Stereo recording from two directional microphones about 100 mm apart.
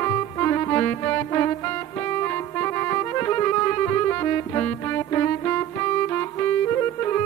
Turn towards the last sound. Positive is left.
turn(degrees=25)  # may be behind; listen again after turning